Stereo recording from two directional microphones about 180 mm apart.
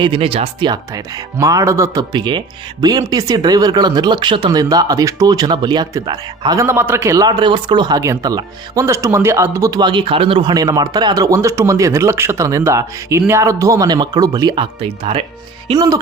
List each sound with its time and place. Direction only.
0.0 s speech: 30° right (ahead or behind)